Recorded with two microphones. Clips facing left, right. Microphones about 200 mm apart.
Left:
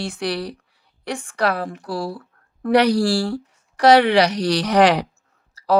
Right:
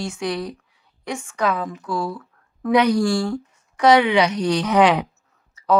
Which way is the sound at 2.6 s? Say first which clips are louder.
Left 1 dB; 70° left (ahead or behind).